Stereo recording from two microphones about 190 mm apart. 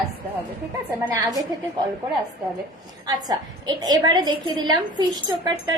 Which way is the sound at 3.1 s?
20° right (ahead or behind).